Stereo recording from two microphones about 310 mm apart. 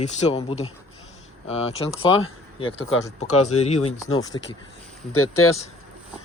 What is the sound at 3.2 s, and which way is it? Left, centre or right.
Speech, left.